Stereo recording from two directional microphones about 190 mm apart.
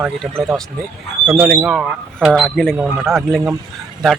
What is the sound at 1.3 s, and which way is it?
Speech, 5° right (ahead or behind).